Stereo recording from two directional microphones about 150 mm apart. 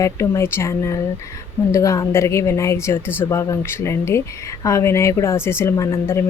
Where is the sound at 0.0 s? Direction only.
20° left (ahead or behind).